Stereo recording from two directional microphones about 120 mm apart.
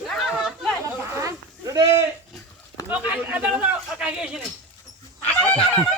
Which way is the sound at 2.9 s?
10° right (ahead or behind).